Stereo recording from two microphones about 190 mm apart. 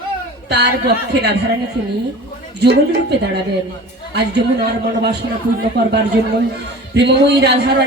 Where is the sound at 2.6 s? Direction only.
60° right (ahead or behind).